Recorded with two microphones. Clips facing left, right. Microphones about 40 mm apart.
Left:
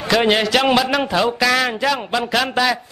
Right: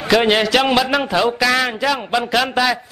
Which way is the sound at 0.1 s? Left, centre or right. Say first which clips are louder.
Right 1 dB; centre.